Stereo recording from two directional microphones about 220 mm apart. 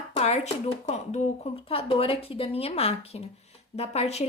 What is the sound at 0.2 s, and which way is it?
Speech, 30° left (ahead or behind).